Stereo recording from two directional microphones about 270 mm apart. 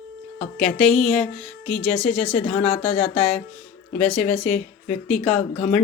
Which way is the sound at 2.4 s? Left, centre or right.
Left.